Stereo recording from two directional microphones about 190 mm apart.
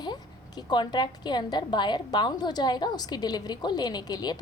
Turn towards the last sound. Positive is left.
turn(degrees=20)  # may be behind; listen again after turning